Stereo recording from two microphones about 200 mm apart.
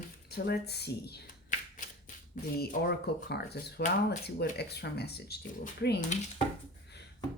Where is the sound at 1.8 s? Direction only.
40° left (ahead or behind).